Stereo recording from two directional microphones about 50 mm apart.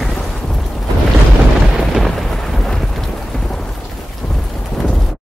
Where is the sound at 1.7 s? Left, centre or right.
Centre.